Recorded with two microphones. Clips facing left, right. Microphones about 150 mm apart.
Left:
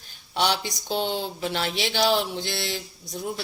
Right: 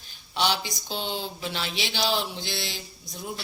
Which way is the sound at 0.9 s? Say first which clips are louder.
Left 6 dB; 55° left (ahead or behind).